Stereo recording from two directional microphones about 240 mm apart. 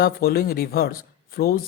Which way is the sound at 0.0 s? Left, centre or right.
Left.